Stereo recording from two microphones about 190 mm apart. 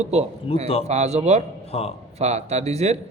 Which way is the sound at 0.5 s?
30° left (ahead or behind).